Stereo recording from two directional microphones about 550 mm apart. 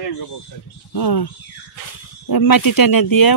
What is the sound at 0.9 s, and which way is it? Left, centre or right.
Speech, left.